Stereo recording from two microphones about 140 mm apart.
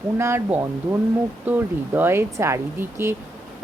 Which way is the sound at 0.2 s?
20° right (ahead or behind).